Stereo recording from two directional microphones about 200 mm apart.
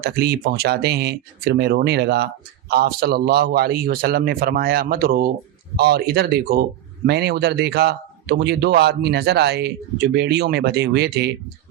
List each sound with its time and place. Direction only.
0.0 s a man's voice: 50° right (ahead or behind)